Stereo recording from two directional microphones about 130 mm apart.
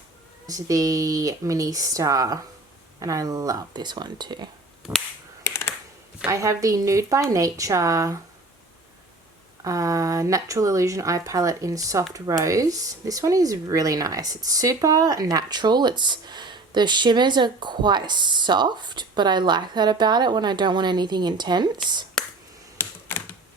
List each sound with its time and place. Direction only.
0.4 s speech: 25° right (ahead or behind)
5.4 s computer keyboard: 20° left (ahead or behind)
6.3 s speech: 25° right (ahead or behind)
9.6 s speech: 25° right (ahead or behind)
22.2 s whispering: 5° left (ahead or behind)
22.8 s typewriter: 20° left (ahead or behind)